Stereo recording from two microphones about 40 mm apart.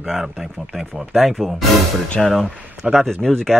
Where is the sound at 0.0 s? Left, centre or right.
Centre.